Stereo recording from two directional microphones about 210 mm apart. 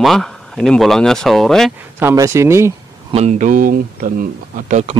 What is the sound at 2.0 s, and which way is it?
Speech, 15° right (ahead or behind).